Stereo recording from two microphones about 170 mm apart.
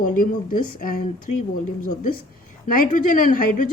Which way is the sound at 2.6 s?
55° left (ahead or behind).